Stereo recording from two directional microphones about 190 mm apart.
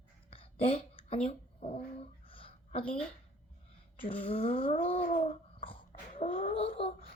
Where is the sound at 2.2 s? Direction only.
30° left (ahead or behind).